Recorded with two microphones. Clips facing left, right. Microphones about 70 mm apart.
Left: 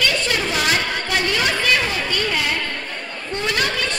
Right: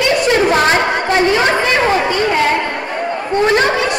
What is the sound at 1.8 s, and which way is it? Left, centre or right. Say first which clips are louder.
Chatter: right 9 dB; right.